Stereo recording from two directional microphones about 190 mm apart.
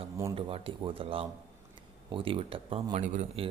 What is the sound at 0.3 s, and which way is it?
Speech, 30° right (ahead or behind).